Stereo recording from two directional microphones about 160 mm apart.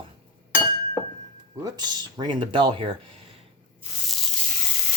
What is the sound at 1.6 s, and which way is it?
Speech, 25° right (ahead or behind).